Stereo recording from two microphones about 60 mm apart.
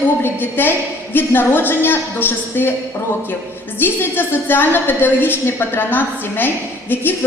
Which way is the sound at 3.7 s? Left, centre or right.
Left.